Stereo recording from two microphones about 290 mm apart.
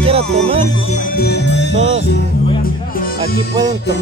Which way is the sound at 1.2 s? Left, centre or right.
Left.